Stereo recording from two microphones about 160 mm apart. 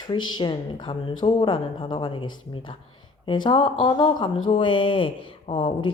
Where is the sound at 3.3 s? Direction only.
30° left (ahead or behind).